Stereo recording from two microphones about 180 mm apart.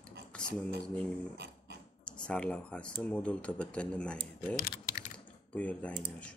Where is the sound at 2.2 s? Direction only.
5° left (ahead or behind).